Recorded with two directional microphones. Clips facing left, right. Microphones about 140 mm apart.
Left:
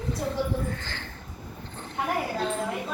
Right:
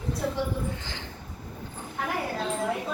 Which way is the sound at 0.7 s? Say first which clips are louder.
Left 1 dB; 15° right (ahead or behind).